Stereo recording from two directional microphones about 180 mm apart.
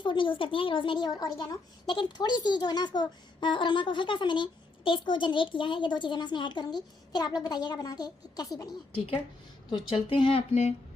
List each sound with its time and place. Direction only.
0.0 s speech: 25° left (ahead or behind)
9.9 s speech: 30° left (ahead or behind)